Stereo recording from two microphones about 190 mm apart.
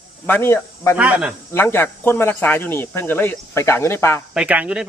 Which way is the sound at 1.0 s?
5° right (ahead or behind).